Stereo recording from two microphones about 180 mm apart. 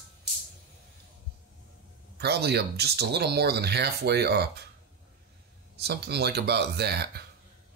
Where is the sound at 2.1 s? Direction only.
65° right (ahead or behind).